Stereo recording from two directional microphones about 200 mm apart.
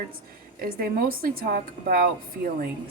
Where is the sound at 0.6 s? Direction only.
45° right (ahead or behind).